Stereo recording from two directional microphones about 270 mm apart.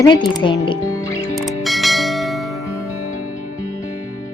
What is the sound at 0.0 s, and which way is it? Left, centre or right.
Speech, centre.